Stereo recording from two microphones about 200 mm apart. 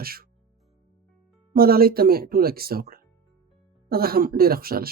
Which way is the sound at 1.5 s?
50° right (ahead or behind).